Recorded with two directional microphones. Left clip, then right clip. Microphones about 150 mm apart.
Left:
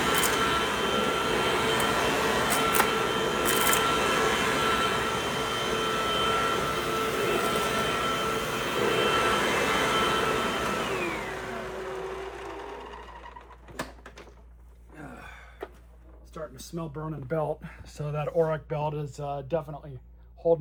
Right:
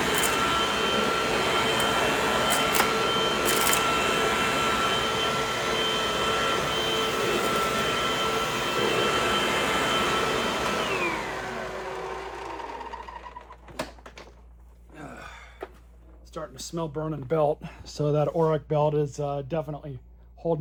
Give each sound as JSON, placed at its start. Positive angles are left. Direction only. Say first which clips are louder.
{"t": 0.0, "sound": "vacuum cleaner", "louder": "right 1 dB", "side_deg": 0}
{"t": 15.6, "sound": "a sound", "louder": "left 1 dB", "side_deg": 0}
{"t": 16.7, "sound": "speech", "louder": "right 7 dB", "side_deg": -30}